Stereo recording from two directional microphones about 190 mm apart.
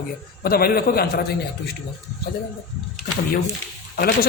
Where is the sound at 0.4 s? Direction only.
50° left (ahead or behind).